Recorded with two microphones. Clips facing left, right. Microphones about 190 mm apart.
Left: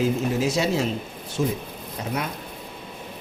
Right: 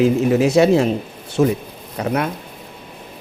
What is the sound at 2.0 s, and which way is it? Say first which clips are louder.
Speech: right 8 dB; 60° right (ahead or behind).